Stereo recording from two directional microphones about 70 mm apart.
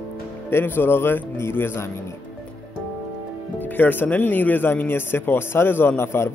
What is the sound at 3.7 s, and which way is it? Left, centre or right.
Speech, left.